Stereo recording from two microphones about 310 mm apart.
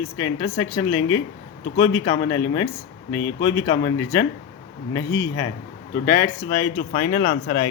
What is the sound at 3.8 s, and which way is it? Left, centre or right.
Speech, left.